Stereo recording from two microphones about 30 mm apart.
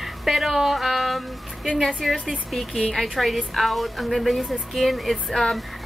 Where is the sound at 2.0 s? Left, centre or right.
Centre.